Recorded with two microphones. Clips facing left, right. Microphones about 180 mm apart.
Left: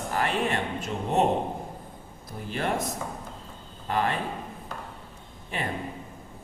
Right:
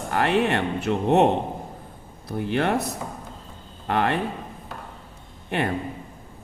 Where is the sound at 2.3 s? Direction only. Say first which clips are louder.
Right 6 dB; 70° right (ahead or behind).